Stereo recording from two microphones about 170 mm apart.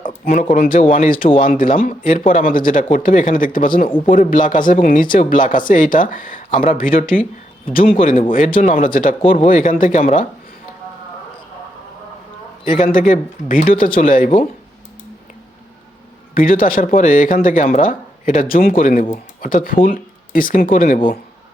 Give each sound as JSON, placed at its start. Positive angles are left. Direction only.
{"t": 0.5, "sound": "speech", "side_deg": 55}
{"t": 12.6, "sound": "speech", "side_deg": 50}
{"t": 16.3, "sound": "speech", "side_deg": 55}